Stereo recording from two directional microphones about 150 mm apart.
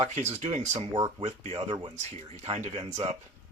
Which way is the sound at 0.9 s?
35° right (ahead or behind).